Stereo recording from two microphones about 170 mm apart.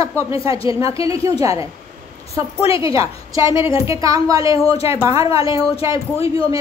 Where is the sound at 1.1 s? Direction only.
20° right (ahead or behind).